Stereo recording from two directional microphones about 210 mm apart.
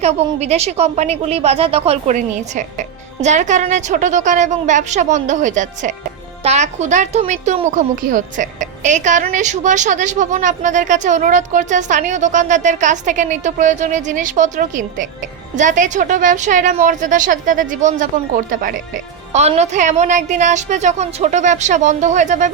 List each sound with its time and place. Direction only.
0.0 s speech: 30° right (ahead or behind)